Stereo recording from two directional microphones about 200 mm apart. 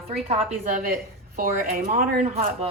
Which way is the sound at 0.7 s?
40° right (ahead or behind).